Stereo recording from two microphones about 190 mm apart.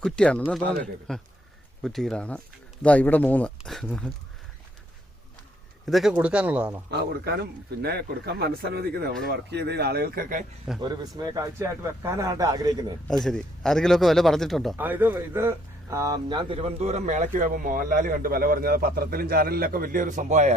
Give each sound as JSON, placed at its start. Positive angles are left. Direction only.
{"t": 0.0, "sound": "speech", "side_deg": 5}
{"t": 5.8, "sound": "speech", "side_deg": 0}
{"t": 6.9, "sound": "speech", "side_deg": -55}
{"t": 10.8, "sound": "a man's voice", "side_deg": -20}
{"t": 13.1, "sound": "speech", "side_deg": 5}
{"t": 14.8, "sound": "speech", "side_deg": -10}